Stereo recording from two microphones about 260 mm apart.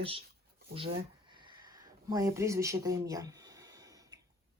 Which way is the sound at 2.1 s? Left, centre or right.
Centre.